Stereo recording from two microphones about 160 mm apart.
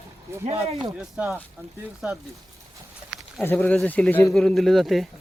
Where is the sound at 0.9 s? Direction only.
10° right (ahead or behind).